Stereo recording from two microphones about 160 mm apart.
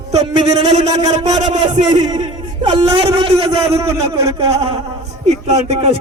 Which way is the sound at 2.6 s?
40° right (ahead or behind).